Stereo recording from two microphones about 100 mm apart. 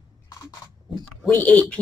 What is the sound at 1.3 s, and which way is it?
Speech, 15° left (ahead or behind).